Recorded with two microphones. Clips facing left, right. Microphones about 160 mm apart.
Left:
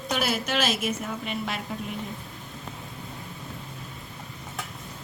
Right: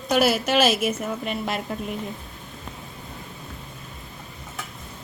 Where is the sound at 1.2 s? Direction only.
50° right (ahead or behind).